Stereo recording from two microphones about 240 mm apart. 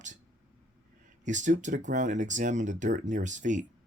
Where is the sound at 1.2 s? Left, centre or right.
Right.